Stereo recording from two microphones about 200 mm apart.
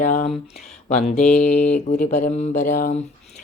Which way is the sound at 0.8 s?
35° left (ahead or behind).